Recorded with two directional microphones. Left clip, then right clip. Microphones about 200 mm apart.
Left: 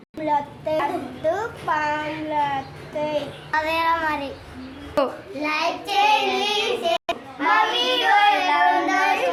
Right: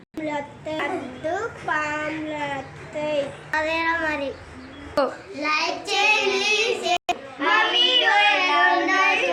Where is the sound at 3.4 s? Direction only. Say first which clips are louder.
Left 3 dB; 20° left (ahead or behind).